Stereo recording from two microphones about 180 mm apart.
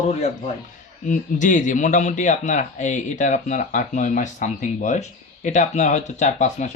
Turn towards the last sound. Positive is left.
turn(degrees=40)  # may be behind; listen again after turning